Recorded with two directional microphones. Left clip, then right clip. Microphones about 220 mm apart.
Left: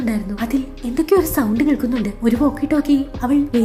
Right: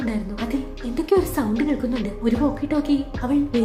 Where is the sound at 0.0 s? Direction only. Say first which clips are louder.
Left 4 dB; 20° left (ahead or behind).